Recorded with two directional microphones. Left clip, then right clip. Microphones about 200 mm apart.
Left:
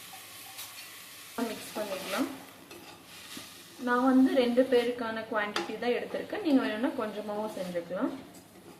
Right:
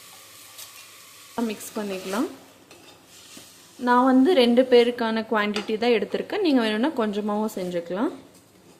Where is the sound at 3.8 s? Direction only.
55° right (ahead or behind).